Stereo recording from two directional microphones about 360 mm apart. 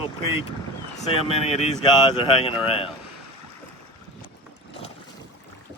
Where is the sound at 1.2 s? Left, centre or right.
Centre.